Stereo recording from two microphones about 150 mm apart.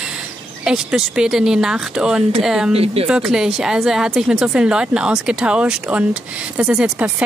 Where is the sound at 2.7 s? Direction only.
40° right (ahead or behind).